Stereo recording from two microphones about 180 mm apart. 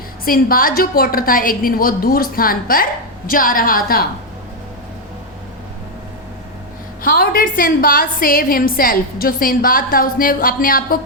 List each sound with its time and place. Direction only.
0.3 s a woman's voice: 55° left (ahead or behind)
7.0 s a woman's voice: 55° left (ahead or behind)